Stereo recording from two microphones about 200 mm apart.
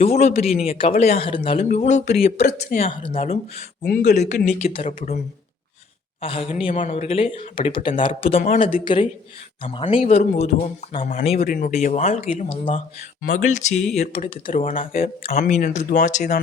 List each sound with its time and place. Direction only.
0.0 s speech: 30° left (ahead or behind)
3.8 s speech: 50° left (ahead or behind)
4.6 s speech: 30° left (ahead or behind)
6.2 s speech: 30° left (ahead or behind)
8.4 s speech: 45° left (ahead or behind)
8.7 s speech: 25° left (ahead or behind)
11.4 s speech: 45° left (ahead or behind)
14.6 s speech: 40° left (ahead or behind)